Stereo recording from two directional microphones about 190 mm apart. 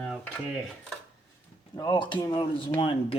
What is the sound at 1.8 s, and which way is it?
Speech, 25° left (ahead or behind).